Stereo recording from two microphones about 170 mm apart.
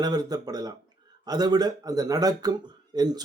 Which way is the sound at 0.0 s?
25° right (ahead or behind).